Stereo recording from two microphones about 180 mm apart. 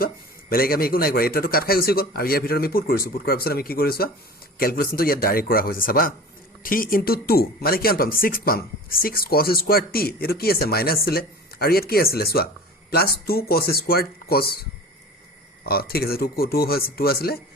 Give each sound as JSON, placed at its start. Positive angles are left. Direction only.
{"t": 0.5, "sound": "speech", "side_deg": 55}
{"t": 15.6, "sound": "speech", "side_deg": 55}